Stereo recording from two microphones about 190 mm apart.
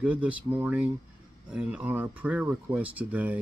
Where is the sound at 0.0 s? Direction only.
5° right (ahead or behind).